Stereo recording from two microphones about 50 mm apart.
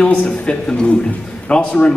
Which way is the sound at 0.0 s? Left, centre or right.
Left.